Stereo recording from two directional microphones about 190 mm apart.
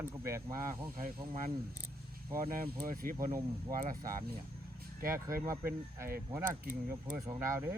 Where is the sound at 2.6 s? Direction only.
50° right (ahead or behind).